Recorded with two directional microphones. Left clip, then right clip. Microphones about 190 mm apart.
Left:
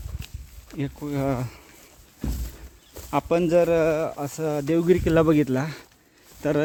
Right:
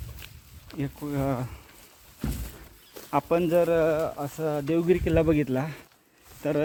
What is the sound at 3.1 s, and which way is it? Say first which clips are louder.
Speech: left 2 dB; 20° left (ahead or behind).